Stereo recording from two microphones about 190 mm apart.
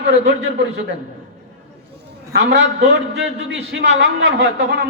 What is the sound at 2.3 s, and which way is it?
A man's voice, 70° right (ahead or behind).